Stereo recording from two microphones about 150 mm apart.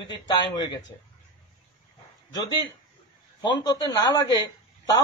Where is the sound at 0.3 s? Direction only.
25° left (ahead or behind).